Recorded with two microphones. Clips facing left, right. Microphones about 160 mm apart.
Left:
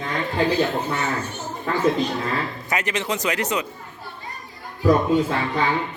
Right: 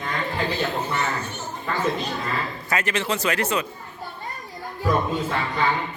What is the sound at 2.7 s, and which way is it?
Speech, 20° left (ahead or behind).